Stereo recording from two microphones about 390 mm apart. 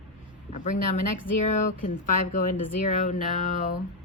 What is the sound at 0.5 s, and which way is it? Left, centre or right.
Speech, centre.